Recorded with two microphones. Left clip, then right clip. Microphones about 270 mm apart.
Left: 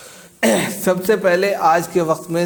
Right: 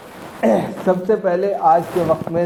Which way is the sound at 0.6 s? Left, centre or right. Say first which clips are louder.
Even; left.